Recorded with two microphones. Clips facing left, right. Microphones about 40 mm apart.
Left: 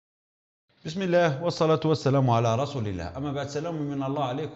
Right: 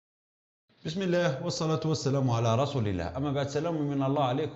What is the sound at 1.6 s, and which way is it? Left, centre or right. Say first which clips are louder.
Speech: left 9 dB; left.